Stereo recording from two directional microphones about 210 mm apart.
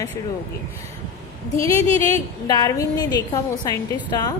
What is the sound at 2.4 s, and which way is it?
A woman's voice, 20° left (ahead or behind).